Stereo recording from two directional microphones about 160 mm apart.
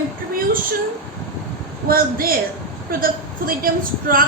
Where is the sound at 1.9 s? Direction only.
65° right (ahead or behind).